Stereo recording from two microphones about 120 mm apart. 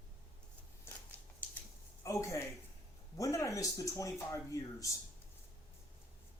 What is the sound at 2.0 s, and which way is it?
Speech, 25° left (ahead or behind).